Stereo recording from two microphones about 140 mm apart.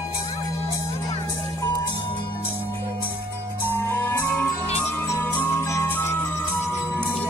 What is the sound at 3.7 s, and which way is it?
Music, 15° left (ahead or behind).